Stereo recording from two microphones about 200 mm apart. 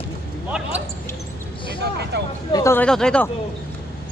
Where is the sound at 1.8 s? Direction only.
55° right (ahead or behind).